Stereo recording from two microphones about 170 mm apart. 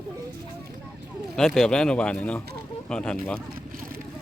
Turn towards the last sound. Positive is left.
turn(degrees=5)  # may be behind; listen again after turning